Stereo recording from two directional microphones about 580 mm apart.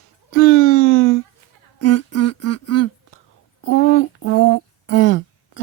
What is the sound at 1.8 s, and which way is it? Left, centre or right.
Humming, left.